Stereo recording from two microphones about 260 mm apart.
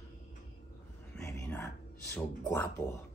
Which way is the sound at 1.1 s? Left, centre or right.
Centre.